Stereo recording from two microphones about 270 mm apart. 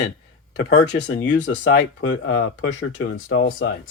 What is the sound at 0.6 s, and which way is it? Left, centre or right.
Speech, left.